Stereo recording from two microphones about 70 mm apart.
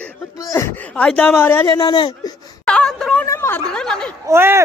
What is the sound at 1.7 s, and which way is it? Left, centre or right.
Speech, left.